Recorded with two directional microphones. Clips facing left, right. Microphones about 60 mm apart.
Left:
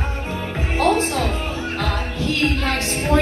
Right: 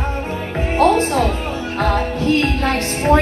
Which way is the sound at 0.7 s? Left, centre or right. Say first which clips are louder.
Right 4 dB; right.